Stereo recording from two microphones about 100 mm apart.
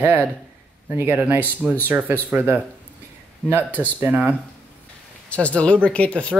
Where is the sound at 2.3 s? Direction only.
15° right (ahead or behind).